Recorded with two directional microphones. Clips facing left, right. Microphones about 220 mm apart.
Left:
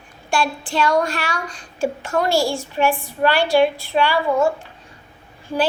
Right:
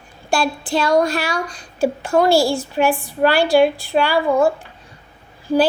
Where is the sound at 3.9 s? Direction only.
35° right (ahead or behind).